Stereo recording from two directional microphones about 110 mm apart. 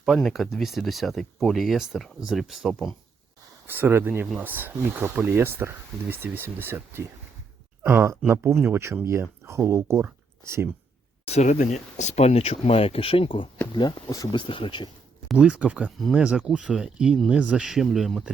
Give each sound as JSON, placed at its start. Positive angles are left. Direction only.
{"t": 0.0, "sound": "speech", "side_deg": 0}
{"t": 3.7, "sound": "speech", "side_deg": -20}
{"t": 11.3, "sound": "speech", "side_deg": 90}
{"t": 15.3, "sound": "speech", "side_deg": -10}
{"t": 16.0, "sound": "speech", "side_deg": 0}